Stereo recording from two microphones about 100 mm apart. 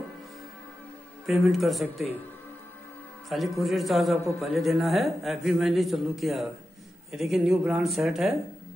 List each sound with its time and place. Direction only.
1.2 s a man's voice: centre (ahead or behind)
3.3 s a man's voice: centre (ahead or behind)